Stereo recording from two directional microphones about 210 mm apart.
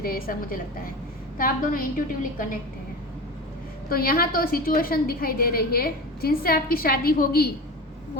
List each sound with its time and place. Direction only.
0.0 s a woman's voice: 45° left (ahead or behind)
3.8 s a woman's voice: 45° left (ahead or behind)